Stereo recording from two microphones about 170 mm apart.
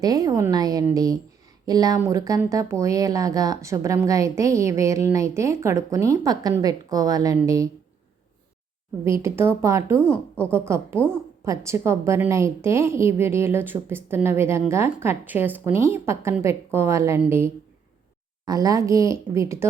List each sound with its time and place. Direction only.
0.0 s speech: 20° right (ahead or behind)
9.0 s a woman's voice: 15° right (ahead or behind)